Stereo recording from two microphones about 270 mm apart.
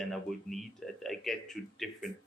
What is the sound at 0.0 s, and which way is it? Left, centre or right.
Speech, centre.